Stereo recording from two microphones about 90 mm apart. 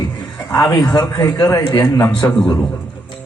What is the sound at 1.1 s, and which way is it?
A man's voice, 45° left (ahead or behind).